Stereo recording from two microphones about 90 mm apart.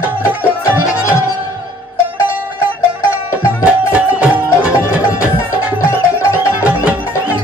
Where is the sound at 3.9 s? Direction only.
15° right (ahead or behind).